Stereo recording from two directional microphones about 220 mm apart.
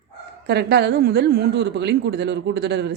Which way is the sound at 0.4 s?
50° right (ahead or behind).